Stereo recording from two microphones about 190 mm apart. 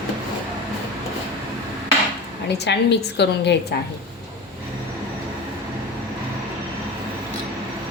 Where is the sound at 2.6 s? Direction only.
60° left (ahead or behind).